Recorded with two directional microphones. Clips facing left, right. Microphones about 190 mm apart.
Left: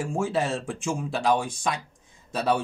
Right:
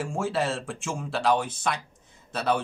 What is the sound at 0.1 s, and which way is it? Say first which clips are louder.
A man's voice: left 2 dB; 15° left (ahead or behind).